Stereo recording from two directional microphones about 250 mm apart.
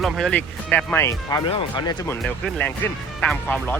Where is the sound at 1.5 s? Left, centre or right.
Left.